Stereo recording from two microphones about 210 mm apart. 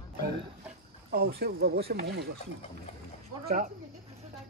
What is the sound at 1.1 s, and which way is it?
Speech, 45° right (ahead or behind).